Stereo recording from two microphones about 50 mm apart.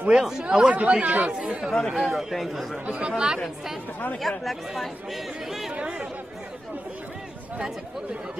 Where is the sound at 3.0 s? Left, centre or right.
Centre.